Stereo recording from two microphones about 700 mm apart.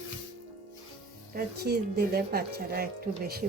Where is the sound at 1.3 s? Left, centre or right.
Centre.